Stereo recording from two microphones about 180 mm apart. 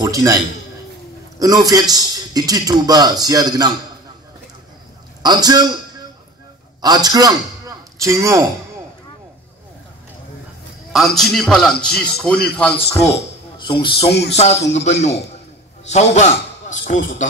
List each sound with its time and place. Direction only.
0.0 s a sound: 20° right (ahead or behind)
1.4 s a man's voice: 20° right (ahead or behind)
5.2 s a man's voice: 20° right (ahead or behind)
10.9 s a man's voice: centre (ahead or behind)
13.6 s a man's voice: 25° left (ahead or behind); by 17.3 s 45° left (ahead or behind)